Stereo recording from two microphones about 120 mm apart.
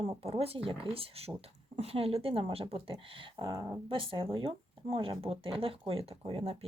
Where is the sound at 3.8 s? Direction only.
45° right (ahead or behind).